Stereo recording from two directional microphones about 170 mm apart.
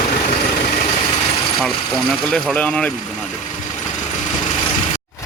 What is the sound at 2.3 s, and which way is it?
Speech, 5° left (ahead or behind).